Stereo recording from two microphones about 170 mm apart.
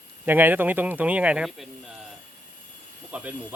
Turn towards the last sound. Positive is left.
turn(degrees=-10)  # may be behind; listen again after turning